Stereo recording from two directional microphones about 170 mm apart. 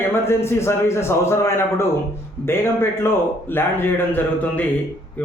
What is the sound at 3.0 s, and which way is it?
A man's voice, 15° left (ahead or behind).